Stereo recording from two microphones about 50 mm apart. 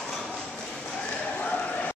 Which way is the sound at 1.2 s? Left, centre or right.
Left.